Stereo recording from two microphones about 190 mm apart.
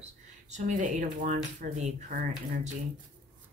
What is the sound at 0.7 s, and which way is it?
Speech, 40° right (ahead or behind).